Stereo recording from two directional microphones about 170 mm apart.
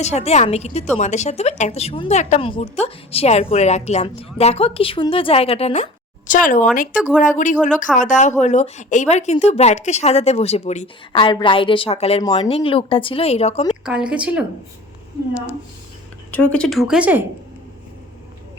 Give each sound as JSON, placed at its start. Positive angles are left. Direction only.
{"t": 0.0, "sound": "speech", "side_deg": 40}
{"t": 6.2, "sound": "speech", "side_deg": 50}
{"t": 6.9, "sound": "speech", "side_deg": 5}
{"t": 7.2, "sound": "speech", "side_deg": 50}
{"t": 13.8, "sound": "speech", "side_deg": -5}
{"t": 16.3, "sound": "speech", "side_deg": 10}